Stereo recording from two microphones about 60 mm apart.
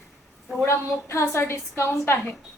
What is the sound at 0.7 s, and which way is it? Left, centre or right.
A woman's voice, left.